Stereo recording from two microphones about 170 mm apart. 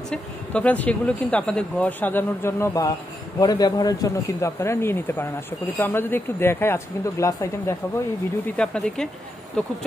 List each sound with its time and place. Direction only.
0.1 s speech: 5° left (ahead or behind)
8.5 s speech: 5° left (ahead or behind)